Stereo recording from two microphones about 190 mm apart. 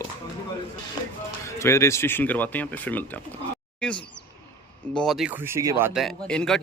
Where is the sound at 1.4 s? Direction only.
15° left (ahead or behind).